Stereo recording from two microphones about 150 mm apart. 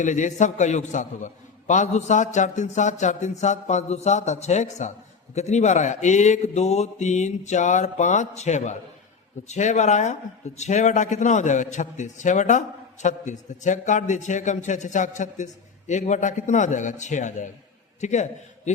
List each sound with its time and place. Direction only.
0.0 s a man's voice: 55° left (ahead or behind)